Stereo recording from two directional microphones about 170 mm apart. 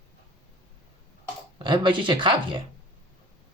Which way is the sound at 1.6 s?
30° right (ahead or behind).